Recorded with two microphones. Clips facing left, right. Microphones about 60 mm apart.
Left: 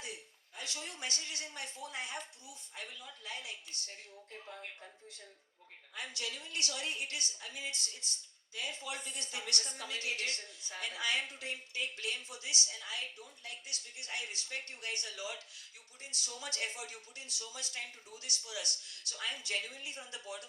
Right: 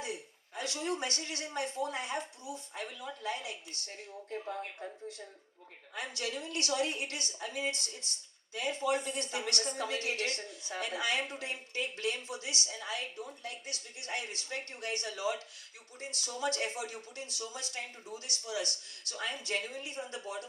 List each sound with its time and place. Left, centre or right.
0.0 s a man's voice: right